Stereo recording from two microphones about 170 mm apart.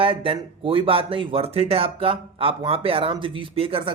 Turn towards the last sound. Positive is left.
turn(degrees=-30)  # may be behind; listen again after turning